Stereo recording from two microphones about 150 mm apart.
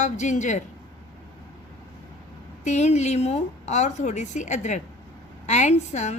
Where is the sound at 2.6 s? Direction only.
50° left (ahead or behind).